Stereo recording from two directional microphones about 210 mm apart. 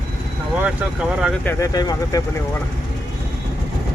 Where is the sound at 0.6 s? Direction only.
5° right (ahead or behind).